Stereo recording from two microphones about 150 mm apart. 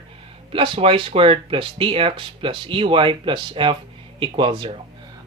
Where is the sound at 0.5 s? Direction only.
35° right (ahead or behind).